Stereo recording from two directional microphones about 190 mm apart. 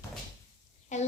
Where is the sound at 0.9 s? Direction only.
40° left (ahead or behind).